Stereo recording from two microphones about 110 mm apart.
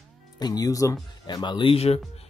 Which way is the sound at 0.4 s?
35° left (ahead or behind).